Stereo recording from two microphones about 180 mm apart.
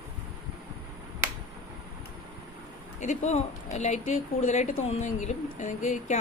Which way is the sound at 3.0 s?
40° left (ahead or behind).